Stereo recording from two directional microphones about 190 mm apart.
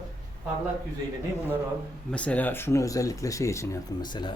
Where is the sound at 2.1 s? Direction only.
5° left (ahead or behind).